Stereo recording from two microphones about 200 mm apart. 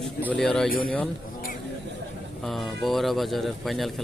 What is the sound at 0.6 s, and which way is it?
Speech, 45° left (ahead or behind).